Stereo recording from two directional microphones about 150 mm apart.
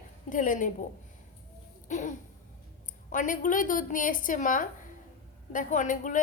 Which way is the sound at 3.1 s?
60° left (ahead or behind).